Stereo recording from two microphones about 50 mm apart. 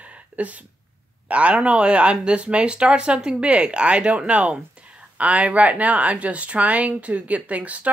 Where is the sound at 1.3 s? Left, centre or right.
Right.